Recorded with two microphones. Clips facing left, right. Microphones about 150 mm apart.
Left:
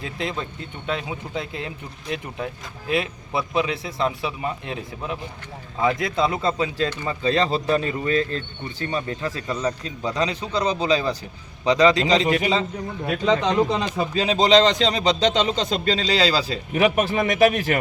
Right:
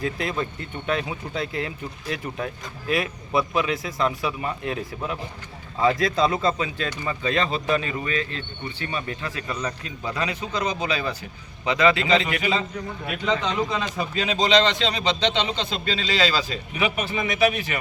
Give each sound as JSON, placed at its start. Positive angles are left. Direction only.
{"t": 0.0, "sound": "speech", "side_deg": 25}
{"t": 13.3, "sound": "a man's voice", "side_deg": 45}
{"t": 13.9, "sound": "speech", "side_deg": 30}